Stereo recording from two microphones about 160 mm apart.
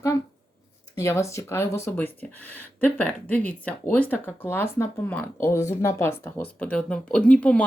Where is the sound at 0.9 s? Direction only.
20° left (ahead or behind).